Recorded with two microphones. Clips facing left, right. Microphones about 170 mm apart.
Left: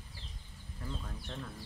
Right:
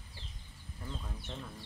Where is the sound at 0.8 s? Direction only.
5° right (ahead or behind).